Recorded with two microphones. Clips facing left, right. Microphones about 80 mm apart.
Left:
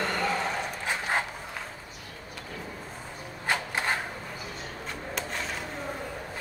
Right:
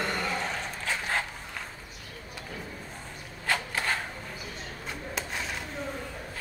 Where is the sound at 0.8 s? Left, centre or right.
Left.